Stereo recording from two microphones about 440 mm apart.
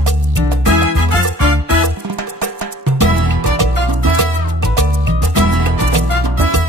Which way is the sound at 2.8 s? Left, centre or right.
Right.